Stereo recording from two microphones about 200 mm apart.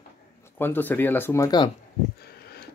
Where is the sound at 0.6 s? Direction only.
10° left (ahead or behind).